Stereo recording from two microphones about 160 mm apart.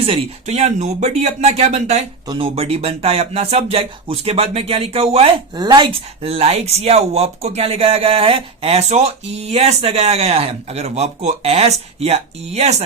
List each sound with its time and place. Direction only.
0.0 s speech: 40° right (ahead or behind)
2.2 s speech: 25° right (ahead or behind)
2.6 s speech: 40° right (ahead or behind)
5.5 s speech: 25° right (ahead or behind)